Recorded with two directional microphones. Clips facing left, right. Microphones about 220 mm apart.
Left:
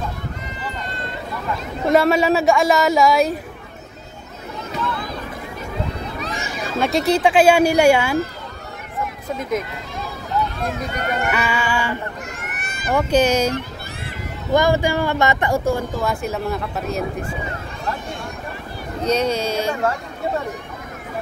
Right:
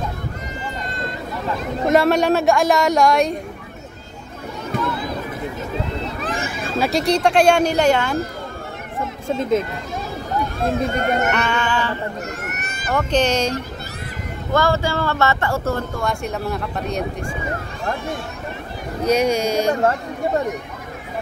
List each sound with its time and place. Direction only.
1.9 s a woman's voice: centre (ahead or behind)
4.7 s a sound: 50° right (ahead or behind)
6.2 s a sound: 50° right (ahead or behind)
6.8 s speech: centre (ahead or behind)
9.0 s speech: 25° right (ahead or behind)
10.9 s speech: 50° right (ahead or behind)
11.3 s speech: 5° left (ahead or behind)
12.4 s a sound: 40° right (ahead or behind)
12.9 s speech: 10° left (ahead or behind)
19.0 s speech: 10° right (ahead or behind)